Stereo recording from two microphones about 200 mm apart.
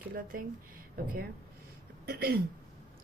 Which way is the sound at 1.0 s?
50° right (ahead or behind).